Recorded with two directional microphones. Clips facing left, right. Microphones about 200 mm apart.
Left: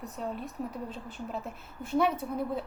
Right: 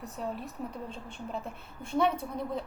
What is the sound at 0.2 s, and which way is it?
A woman's voice, centre (ahead or behind).